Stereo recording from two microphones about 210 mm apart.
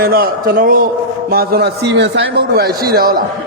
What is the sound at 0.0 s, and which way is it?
A man's voice, 45° right (ahead or behind).